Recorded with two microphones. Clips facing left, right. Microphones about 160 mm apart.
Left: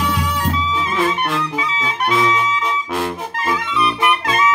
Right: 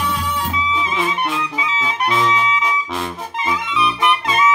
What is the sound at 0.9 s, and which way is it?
Music, 5° right (ahead or behind).